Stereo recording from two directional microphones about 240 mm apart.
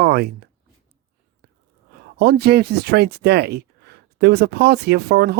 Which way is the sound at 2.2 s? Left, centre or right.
Right.